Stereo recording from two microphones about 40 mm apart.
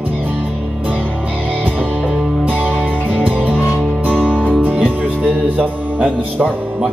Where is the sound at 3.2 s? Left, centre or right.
Right.